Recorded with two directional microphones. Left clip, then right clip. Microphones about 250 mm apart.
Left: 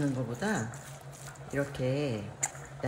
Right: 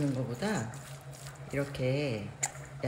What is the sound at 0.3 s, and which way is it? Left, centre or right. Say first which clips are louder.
Speech: left 1 dB; centre.